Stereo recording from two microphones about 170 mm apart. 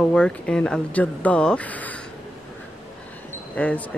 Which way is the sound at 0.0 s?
5° left (ahead or behind).